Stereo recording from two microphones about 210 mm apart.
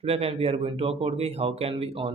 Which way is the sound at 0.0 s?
30° right (ahead or behind).